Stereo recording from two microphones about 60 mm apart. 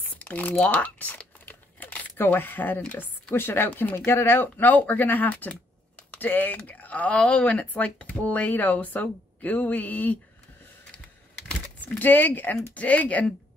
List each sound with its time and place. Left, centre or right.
0.6 s crumpling: left
3.3 s speech: left
3.9 s speech: left
12.0 s speech: left